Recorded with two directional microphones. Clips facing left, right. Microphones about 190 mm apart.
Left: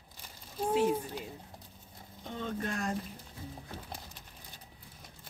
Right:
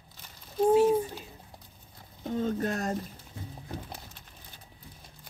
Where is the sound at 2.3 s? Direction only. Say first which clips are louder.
Right 7 dB; 40° right (ahead or behind).